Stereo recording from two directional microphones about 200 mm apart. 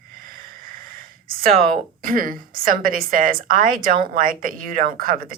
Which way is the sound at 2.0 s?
45° right (ahead or behind).